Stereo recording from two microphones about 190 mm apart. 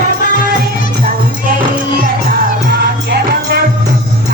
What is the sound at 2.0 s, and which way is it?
Music, 50° right (ahead or behind).